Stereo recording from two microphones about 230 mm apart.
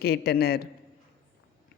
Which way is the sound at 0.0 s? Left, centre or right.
Left.